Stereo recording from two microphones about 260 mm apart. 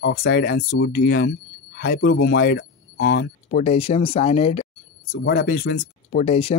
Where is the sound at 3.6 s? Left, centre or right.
Left.